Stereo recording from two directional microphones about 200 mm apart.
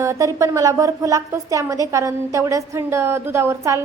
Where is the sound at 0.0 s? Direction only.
15° right (ahead or behind).